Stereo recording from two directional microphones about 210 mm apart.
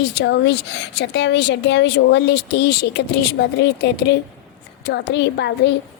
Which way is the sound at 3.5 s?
55° left (ahead or behind).